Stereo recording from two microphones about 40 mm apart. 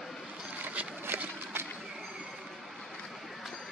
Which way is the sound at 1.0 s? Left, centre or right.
Right.